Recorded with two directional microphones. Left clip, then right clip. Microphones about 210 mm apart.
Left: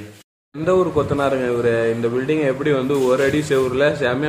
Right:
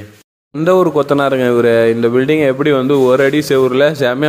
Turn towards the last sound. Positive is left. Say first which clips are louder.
# right 6 dB
turn(degrees=-40)  # may be behind; listen again after turning